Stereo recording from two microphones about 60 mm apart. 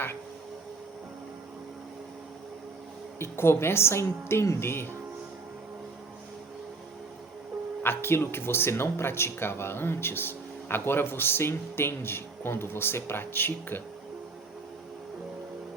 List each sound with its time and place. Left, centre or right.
3.2 s a woman's voice: left
7.8 s speech: left